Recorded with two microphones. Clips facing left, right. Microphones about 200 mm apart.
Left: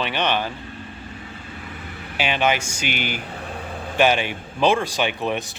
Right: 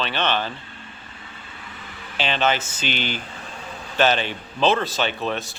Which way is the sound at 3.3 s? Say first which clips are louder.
Left 5 dB; 60° left (ahead or behind).